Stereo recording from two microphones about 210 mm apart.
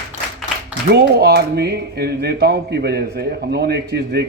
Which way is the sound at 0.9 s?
50° right (ahead or behind).